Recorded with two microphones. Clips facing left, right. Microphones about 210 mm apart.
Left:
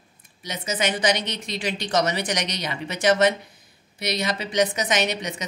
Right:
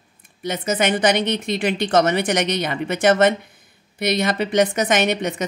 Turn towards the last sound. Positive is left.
turn(degrees=-55)  # may be behind; listen again after turning